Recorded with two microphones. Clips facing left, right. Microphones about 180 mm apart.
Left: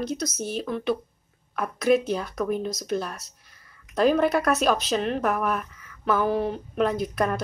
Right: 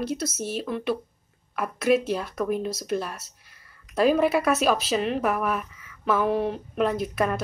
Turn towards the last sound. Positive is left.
turn(degrees=-5)  # may be behind; listen again after turning